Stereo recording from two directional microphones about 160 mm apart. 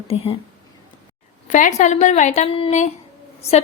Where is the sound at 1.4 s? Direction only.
50° left (ahead or behind).